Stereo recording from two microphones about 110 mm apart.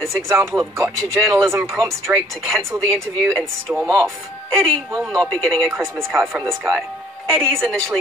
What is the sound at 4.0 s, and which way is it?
Speech, 5° left (ahead or behind).